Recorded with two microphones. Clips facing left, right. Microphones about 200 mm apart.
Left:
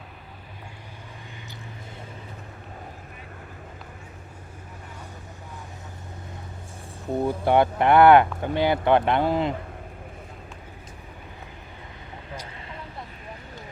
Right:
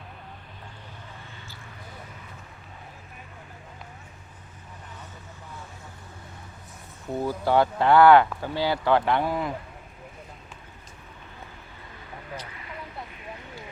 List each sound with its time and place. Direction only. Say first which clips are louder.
7.2 s speech: left 2 dB; 20° left (ahead or behind)